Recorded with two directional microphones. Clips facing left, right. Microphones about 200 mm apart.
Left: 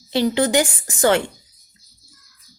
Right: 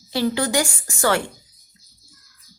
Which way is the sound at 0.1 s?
20° left (ahead or behind).